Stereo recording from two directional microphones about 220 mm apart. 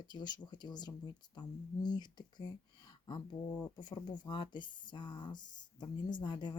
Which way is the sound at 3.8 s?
20° left (ahead or behind).